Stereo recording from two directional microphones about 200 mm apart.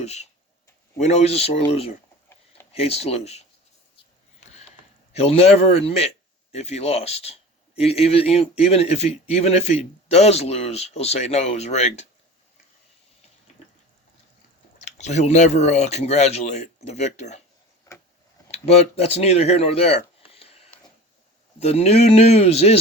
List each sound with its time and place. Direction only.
0.0 s a man's voice: 35° left (ahead or behind)
3.9 s a sound: 35° left (ahead or behind)
5.1 s a man's voice: 30° left (ahead or behind)
14.8 s a man's voice: 35° left (ahead or behind)
18.5 s a man's voice: 30° left (ahead or behind)